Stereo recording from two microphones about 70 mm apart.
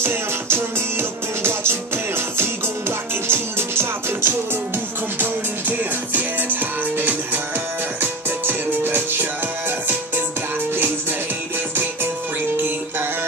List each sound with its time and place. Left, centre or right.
0.0 s music: right
11.7 s music: right